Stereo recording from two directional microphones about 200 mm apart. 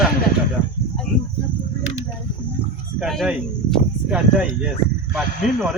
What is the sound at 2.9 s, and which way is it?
Speech, centre (ahead or behind).